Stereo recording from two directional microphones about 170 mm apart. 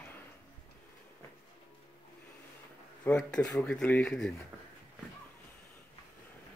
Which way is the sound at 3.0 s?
5° left (ahead or behind).